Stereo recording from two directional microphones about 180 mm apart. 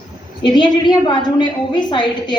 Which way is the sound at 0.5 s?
25° left (ahead or behind).